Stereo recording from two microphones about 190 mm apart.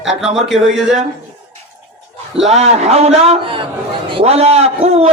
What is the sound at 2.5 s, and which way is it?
A man's voice, 35° right (ahead or behind).